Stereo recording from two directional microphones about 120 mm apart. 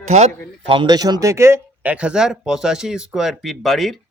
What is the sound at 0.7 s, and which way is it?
Speech, 40° right (ahead or behind).